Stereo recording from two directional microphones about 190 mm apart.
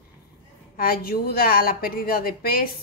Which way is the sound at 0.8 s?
50° left (ahead or behind).